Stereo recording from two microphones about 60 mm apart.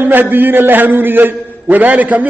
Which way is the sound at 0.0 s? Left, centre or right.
Right.